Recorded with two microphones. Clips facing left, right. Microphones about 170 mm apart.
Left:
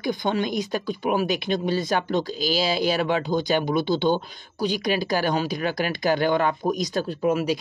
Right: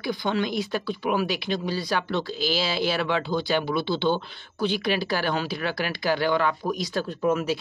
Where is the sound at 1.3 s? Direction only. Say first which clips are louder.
Left 4 dB; 20° left (ahead or behind).